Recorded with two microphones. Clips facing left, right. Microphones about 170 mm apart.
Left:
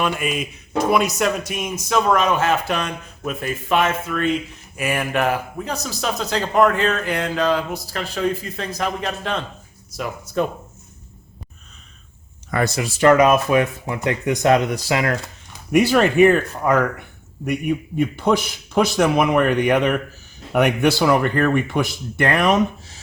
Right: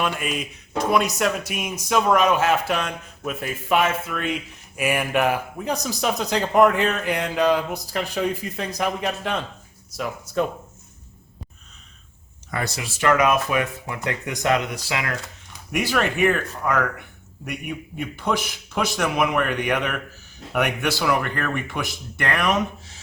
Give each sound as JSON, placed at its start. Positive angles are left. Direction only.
{"t": 0.0, "sound": "speech", "side_deg": 0}
{"t": 9.9, "sound": "speech", "side_deg": 0}
{"t": 12.5, "sound": "speech", "side_deg": 55}
{"t": 13.0, "sound": "speech", "side_deg": 30}
{"t": 15.7, "sound": "speech", "side_deg": 30}
{"t": 18.2, "sound": "speech", "side_deg": 30}